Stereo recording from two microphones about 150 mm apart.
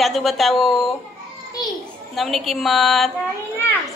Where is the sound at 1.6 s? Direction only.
25° left (ahead or behind).